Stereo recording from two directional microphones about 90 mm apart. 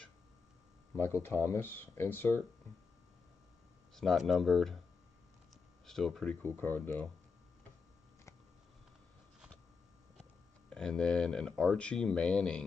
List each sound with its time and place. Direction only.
0.9 s speech: 25° left (ahead or behind)
3.9 s speech: centre (ahead or behind)
5.9 s speech: 5° left (ahead or behind)
6.4 s speech: 20° left (ahead or behind)
10.7 s speech: 10° left (ahead or behind)